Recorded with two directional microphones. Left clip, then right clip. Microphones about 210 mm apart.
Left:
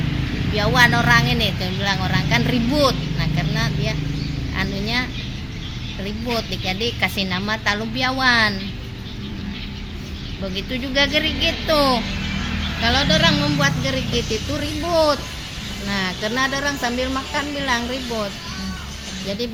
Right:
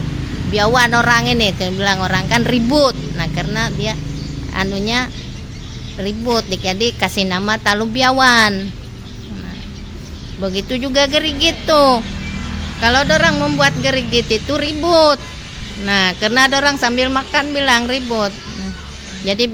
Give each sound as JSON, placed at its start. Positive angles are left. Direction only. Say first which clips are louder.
{"t": 0.5, "sound": "speech", "louder": "right 4 dB", "side_deg": -50}
{"t": 6.1, "sound": "speech", "louder": "right 7 dB", "side_deg": -50}
{"t": 10.4, "sound": "speech", "louder": "right 7 dB", "side_deg": -50}
{"t": 19.3, "sound": "speech", "louder": "right 10 dB", "side_deg": -45}